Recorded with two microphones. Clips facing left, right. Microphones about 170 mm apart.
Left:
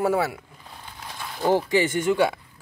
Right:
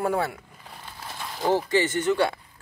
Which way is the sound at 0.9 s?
5° right (ahead or behind).